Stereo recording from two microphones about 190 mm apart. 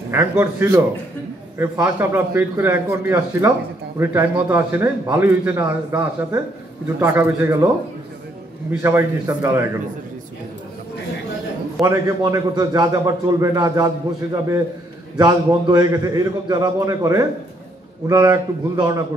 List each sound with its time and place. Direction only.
0.1 s a man's voice: 15° right (ahead or behind)
8.8 s a man's voice: 15° right (ahead or behind)
11.8 s a man's voice: 15° right (ahead or behind)